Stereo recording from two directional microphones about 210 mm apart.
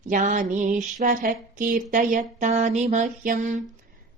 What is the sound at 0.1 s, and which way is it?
Mantra, 35° right (ahead or behind).